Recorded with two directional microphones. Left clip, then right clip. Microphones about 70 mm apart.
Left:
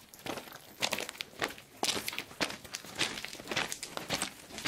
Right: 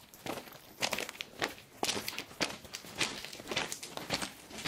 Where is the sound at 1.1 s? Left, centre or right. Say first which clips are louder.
Left 1 dB; centre.